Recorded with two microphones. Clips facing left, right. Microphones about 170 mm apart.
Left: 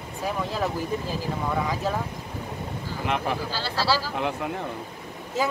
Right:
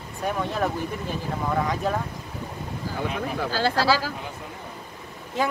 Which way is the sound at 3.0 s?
70° left (ahead or behind).